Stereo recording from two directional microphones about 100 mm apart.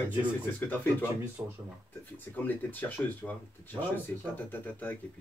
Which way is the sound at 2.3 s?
20° left (ahead or behind).